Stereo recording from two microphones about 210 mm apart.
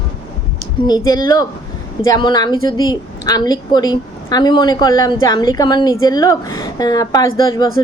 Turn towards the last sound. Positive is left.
turn(degrees=15)  # may be behind; listen again after turning